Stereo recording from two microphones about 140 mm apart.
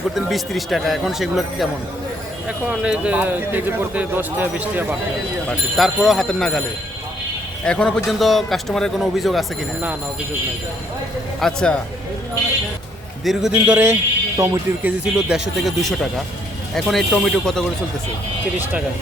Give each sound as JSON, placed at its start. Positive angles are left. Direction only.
{"t": 0.1, "sound": "a man's voice", "side_deg": 0}
{"t": 5.5, "sound": "a man's voice", "side_deg": 0}
{"t": 7.6, "sound": "a man's voice", "side_deg": 5}
{"t": 11.3, "sound": "a man's voice", "side_deg": 5}
{"t": 13.2, "sound": "a man's voice", "side_deg": -5}
{"t": 14.3, "sound": "speech", "side_deg": -25}
{"t": 14.8, "sound": "a man's voice", "side_deg": 0}